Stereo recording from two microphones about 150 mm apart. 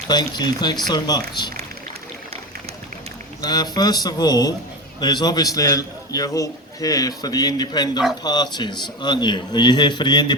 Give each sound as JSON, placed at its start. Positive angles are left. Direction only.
{"t": 0.1, "sound": "a man's voice", "side_deg": 30}
{"t": 3.4, "sound": "a man's voice", "side_deg": 25}